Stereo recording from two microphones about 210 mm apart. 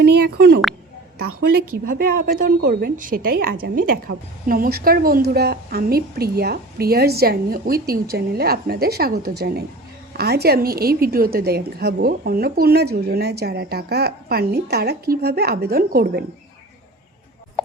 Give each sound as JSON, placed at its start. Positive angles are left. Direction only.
{"t": 0.0, "sound": "speech", "side_deg": -50}
{"t": 1.8, "sound": "a woman's voice", "side_deg": -40}